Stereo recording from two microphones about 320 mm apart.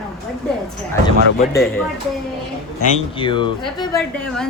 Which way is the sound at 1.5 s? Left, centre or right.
Centre.